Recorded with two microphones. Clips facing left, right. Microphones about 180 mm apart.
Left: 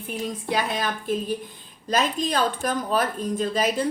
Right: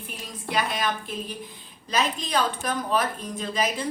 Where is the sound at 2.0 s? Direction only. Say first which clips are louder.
Left 2 dB; 45° left (ahead or behind).